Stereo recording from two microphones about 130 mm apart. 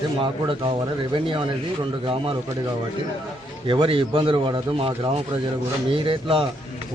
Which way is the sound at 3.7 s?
40° right (ahead or behind).